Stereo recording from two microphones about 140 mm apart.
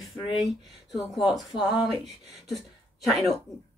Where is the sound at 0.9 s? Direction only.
Centre (ahead or behind).